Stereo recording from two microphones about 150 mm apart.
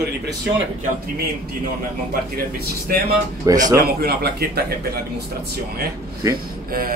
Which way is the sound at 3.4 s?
25° right (ahead or behind).